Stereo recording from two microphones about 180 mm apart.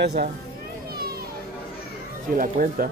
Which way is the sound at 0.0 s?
60° right (ahead or behind).